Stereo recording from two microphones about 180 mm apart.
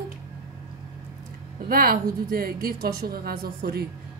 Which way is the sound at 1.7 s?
55° right (ahead or behind).